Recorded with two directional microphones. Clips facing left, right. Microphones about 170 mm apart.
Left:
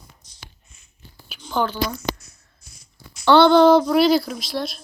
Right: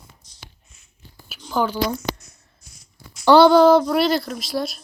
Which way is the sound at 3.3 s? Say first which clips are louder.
Right 1 dB; 10° right (ahead or behind).